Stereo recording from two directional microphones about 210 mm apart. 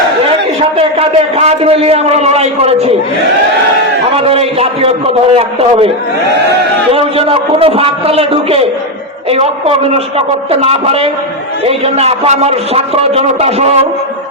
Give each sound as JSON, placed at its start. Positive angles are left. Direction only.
{"t": 0.8, "sound": "a man's voice", "side_deg": -30}
{"t": 4.1, "sound": "a man's voice", "side_deg": -30}
{"t": 6.9, "sound": "a man's voice", "side_deg": -25}